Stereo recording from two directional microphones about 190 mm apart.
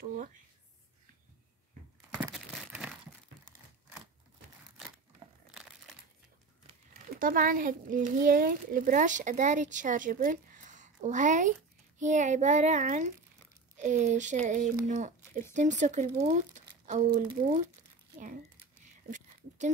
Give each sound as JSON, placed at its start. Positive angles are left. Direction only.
{"t": 0.0, "sound": "speech", "side_deg": -45}
{"t": 2.0, "sound": "crumpling", "side_deg": -15}
{"t": 2.3, "sound": "crumpling", "side_deg": -5}
{"t": 4.6, "sound": "a sound", "side_deg": -5}
{"t": 6.9, "sound": "speech", "side_deg": -50}
{"t": 19.0, "sound": "a sound", "side_deg": -40}